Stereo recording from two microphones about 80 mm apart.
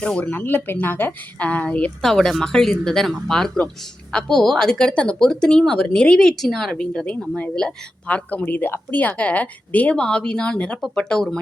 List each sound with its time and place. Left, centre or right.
0.0 s speech: centre
2.0 s speech: centre